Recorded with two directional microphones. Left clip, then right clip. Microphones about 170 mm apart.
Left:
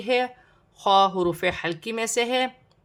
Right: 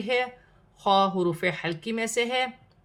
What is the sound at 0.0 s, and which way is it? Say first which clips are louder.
A woman's voice: left 3 dB; 25° left (ahead or behind).